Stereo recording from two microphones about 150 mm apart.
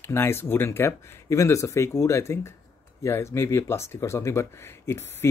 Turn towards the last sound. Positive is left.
turn(degrees=15)  # may be behind; listen again after turning